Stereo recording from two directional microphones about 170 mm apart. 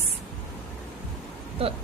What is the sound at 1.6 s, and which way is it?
Speech, 35° right (ahead or behind).